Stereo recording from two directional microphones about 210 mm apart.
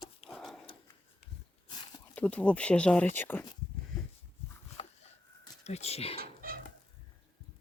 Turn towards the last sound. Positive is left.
turn(degrees=-45)  # may be behind; listen again after turning